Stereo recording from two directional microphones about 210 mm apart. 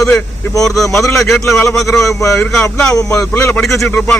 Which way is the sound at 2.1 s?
15° left (ahead or behind).